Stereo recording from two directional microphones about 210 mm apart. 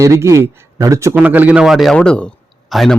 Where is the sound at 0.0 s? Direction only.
15° right (ahead or behind).